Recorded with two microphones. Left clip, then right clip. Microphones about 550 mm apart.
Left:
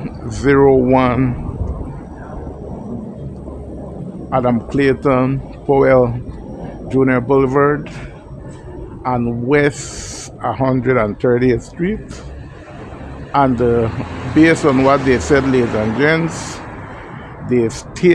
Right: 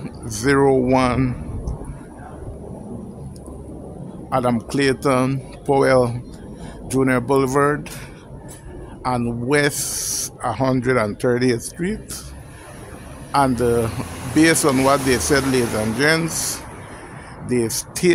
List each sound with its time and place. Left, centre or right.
0.0 s speech: right
4.3 s speech: right
9.0 s speech: right
13.3 s speech: right